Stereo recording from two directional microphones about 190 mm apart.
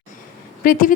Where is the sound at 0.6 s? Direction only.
45° left (ahead or behind).